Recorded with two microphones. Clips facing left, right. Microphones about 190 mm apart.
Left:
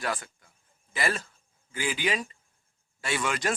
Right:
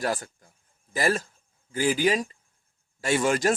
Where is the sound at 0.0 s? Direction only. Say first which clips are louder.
Right 4 dB; 40° right (ahead or behind).